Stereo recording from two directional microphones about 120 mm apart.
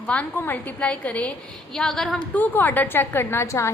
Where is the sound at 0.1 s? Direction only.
15° left (ahead or behind).